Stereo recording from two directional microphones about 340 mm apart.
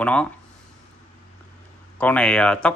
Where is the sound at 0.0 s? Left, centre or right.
Centre.